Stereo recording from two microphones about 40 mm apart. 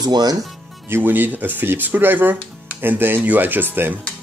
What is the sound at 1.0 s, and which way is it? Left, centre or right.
Speech, right.